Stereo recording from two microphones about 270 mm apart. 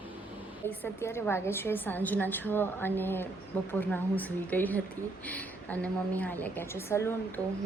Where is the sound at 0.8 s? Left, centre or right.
Centre.